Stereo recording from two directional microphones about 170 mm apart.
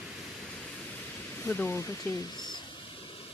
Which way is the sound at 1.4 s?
15° left (ahead or behind).